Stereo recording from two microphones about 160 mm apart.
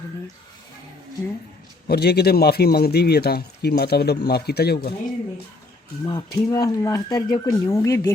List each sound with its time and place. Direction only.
1.9 s speech: 85° left
6.1 s speech: 25° left (ahead or behind)